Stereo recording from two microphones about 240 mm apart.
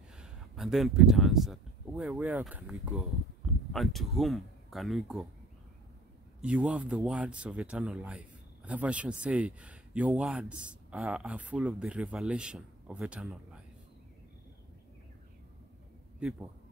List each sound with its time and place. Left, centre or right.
0.2 s speech: centre
6.4 s speech: centre